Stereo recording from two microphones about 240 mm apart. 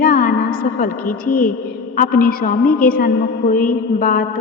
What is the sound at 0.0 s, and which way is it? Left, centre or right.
Music, left.